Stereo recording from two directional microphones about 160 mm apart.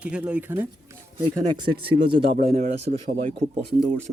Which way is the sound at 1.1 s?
30° right (ahead or behind).